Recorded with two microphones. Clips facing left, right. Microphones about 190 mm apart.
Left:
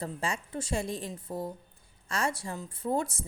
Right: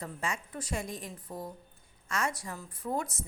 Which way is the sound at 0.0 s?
30° left (ahead or behind).